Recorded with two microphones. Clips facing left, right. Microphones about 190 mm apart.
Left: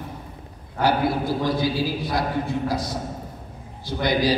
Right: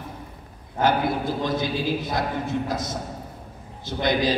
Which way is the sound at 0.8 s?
20° right (ahead or behind).